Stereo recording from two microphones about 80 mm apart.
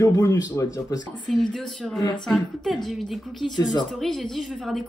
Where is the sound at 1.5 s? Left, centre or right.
Centre.